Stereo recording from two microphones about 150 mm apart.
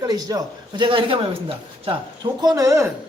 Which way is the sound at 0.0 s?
25° right (ahead or behind).